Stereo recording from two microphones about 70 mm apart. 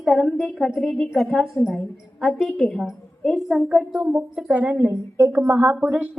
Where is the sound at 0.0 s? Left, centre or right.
Centre; by 4.8 s right.